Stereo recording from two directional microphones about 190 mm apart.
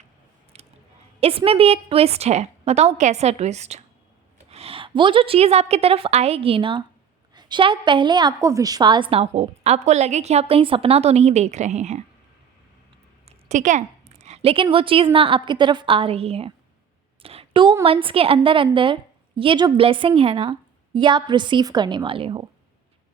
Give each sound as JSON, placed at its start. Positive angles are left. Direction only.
{"t": 0.5, "sound": "a sound", "side_deg": -30}
{"t": 1.2, "sound": "a woman's voice", "side_deg": -30}
{"t": 13.2, "sound": "a woman's voice", "side_deg": -40}